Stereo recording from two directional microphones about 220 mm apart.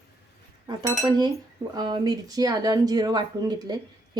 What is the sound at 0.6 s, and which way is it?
Speech, 20° right (ahead or behind).